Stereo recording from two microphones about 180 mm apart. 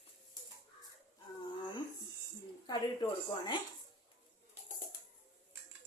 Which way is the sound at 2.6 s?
25° left (ahead or behind).